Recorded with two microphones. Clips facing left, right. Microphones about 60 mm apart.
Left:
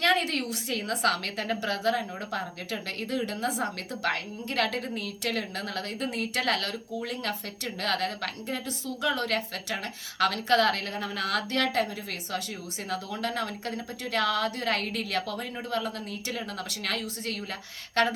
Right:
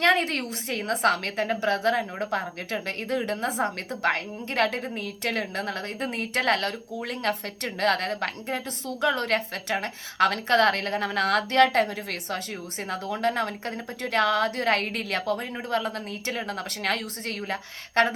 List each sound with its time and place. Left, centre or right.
0.0 s speech: right
12.9 s speech: right
18.0 s speech: right